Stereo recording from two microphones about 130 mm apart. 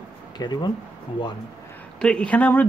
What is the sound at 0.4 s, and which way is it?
Speech, 35° left (ahead or behind).